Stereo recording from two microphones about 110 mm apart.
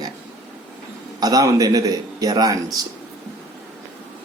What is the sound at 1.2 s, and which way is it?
A man's voice, 35° right (ahead or behind).